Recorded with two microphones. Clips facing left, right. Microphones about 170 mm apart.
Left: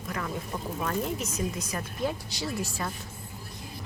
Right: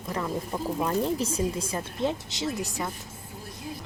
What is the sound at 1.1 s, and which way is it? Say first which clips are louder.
Speech: right 4 dB; 30° right (ahead or behind).